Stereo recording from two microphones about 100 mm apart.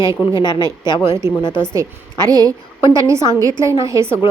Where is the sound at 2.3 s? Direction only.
40° right (ahead or behind).